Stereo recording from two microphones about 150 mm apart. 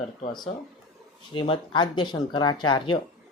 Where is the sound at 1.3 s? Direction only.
35° left (ahead or behind).